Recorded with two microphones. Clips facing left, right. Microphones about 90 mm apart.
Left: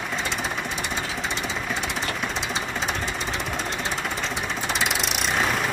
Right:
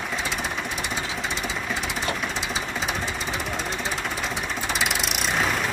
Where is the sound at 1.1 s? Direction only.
Centre (ahead or behind).